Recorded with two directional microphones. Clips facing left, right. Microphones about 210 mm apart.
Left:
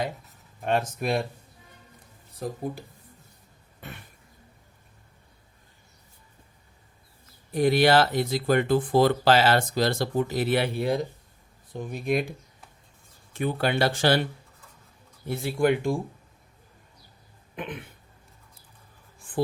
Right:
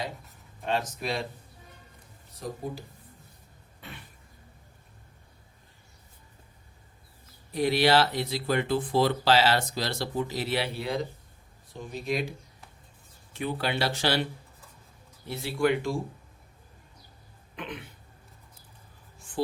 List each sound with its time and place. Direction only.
0.6 s speech: 55° left (ahead or behind)
3.8 s cough: 45° left (ahead or behind)
7.5 s speech: 50° left (ahead or behind)
13.3 s speech: 50° left (ahead or behind)
15.3 s speech: 50° left (ahead or behind)
17.5 s throat clearing: 50° left (ahead or behind)